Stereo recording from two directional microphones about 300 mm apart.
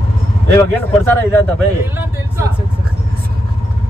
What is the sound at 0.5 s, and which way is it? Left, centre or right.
Speech, centre.